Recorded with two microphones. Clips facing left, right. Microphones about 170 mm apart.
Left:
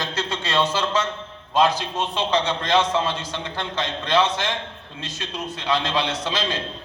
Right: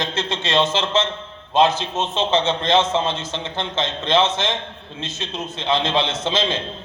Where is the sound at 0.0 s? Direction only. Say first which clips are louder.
Right 3 dB; 25° right (ahead or behind).